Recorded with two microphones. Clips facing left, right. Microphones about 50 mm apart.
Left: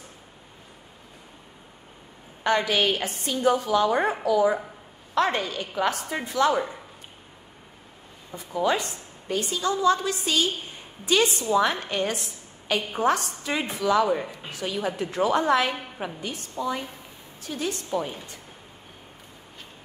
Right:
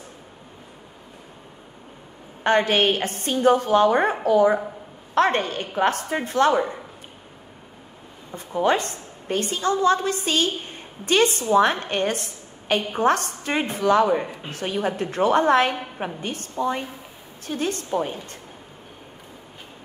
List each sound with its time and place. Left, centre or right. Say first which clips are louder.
2.4 s a woman's voice: right 4 dB; right
8.4 s a woman's voice: right 3 dB; right